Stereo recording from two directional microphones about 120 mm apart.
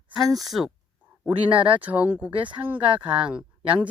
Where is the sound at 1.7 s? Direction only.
10° right (ahead or behind).